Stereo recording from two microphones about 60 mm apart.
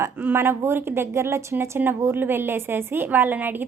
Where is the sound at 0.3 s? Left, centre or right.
Right.